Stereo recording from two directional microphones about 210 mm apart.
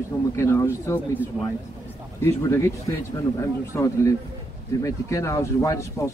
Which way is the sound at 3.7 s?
15° left (ahead or behind).